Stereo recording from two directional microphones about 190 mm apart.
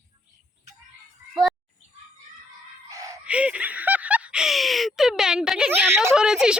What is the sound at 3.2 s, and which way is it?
A child's voice, 5° right (ahead or behind).